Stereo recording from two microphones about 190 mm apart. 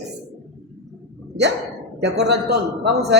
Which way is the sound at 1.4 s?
65° right (ahead or behind).